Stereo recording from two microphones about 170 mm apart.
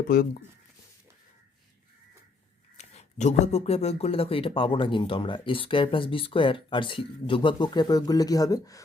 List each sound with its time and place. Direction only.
2.7 s speech: 40° left (ahead or behind); by 8.8 s 20° left (ahead or behind)